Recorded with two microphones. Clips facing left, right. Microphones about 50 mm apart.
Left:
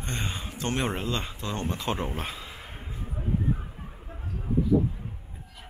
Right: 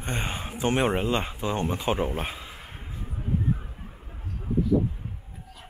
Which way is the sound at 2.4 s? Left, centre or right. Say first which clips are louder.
Even; centre.